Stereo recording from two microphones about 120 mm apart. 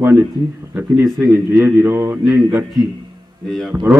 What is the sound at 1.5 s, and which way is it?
Speech, 20° right (ahead or behind).